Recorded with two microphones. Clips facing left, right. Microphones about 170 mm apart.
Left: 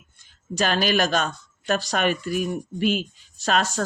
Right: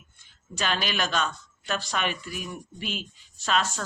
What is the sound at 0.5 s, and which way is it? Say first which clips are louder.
Speech: left 7 dB; 45° left (ahead or behind).